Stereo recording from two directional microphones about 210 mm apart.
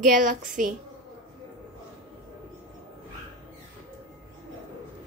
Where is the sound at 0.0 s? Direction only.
40° right (ahead or behind).